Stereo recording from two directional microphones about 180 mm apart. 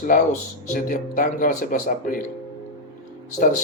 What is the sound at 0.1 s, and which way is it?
A man's voice, 45° left (ahead or behind).